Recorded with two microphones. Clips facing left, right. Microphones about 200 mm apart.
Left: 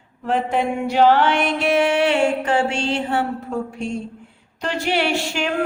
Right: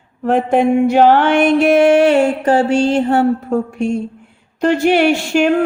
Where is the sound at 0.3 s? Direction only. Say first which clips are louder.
Right 8 dB; 50° right (ahead or behind).